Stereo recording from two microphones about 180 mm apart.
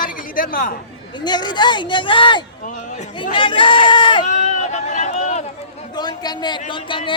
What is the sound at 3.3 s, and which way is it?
Speech, 30° left (ahead or behind).